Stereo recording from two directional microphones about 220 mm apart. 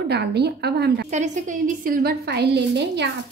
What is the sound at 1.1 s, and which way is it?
A woman's voice, 35° right (ahead or behind).